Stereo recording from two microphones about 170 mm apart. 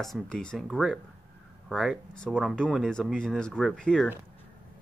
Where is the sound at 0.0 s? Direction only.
5° left (ahead or behind).